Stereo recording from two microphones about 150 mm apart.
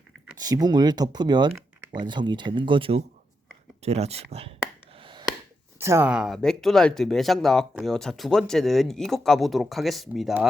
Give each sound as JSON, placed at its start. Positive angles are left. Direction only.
{"t": 0.3, "sound": "speech", "side_deg": -25}
{"t": 4.9, "sound": "gasp", "side_deg": -35}
{"t": 5.8, "sound": "speech", "side_deg": -20}
{"t": 6.1, "sound": "speech", "side_deg": -5}